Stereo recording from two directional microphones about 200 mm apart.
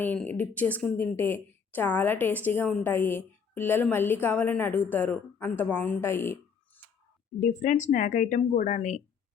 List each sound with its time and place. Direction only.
0.0 s a woman's voice: 10° left (ahead or behind)
7.3 s speech: 40° left (ahead or behind)